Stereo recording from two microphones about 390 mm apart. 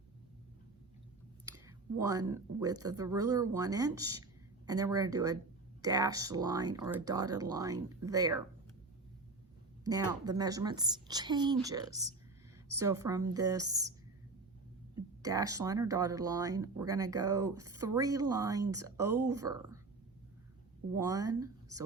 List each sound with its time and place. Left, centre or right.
1.5 s speech: centre
9.8 s speech: centre
15.2 s speech: centre
20.9 s speech: centre